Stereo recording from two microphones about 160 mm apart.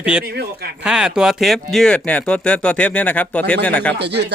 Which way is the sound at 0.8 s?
5° right (ahead or behind).